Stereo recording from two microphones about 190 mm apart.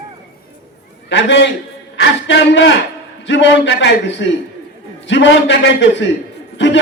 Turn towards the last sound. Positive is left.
turn(degrees=70)  # may be behind; listen again after turning